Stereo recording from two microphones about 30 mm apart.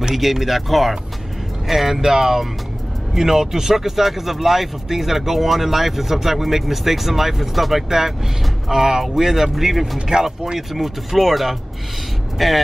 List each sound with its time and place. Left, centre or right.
0.1 s speech: centre